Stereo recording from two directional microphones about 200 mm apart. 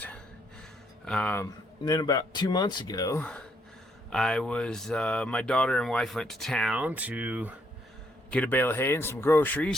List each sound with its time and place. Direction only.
1.0 s a man's voice: 5° left (ahead or behind)
1.8 s speech: 20° left (ahead or behind); by 7.5 s 5° right (ahead or behind)
8.3 s a man's voice: 5° left (ahead or behind)